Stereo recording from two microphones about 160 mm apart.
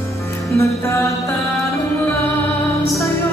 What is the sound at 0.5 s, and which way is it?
Music, 20° left (ahead or behind).